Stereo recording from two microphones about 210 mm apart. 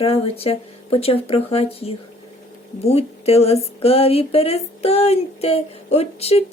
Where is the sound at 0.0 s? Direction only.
25° left (ahead or behind).